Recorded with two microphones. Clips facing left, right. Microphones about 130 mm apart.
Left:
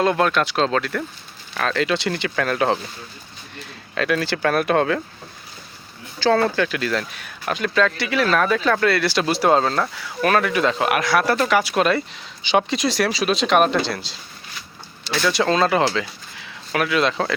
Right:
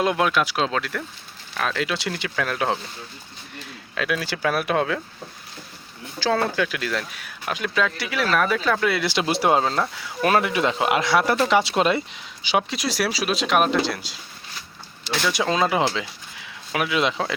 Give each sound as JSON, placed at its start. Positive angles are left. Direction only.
{"t": 0.0, "sound": "speech", "side_deg": -10}
{"t": 3.9, "sound": "speech", "side_deg": -5}
{"t": 6.1, "sound": "speech", "side_deg": -5}
{"t": 8.9, "sound": "speech", "side_deg": -15}
{"t": 12.4, "sound": "speech", "side_deg": -5}
{"t": 15.3, "sound": "speech", "side_deg": -10}